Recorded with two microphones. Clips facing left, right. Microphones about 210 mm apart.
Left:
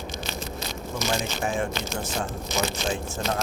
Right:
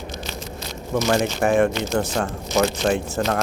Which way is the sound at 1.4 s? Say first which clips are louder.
Right 9 dB; 70° right (ahead or behind).